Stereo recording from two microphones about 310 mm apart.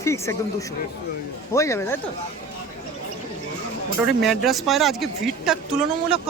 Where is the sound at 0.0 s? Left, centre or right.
Centre.